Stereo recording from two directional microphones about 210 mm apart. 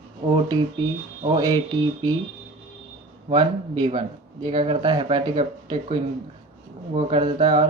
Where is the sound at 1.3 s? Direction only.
20° right (ahead or behind).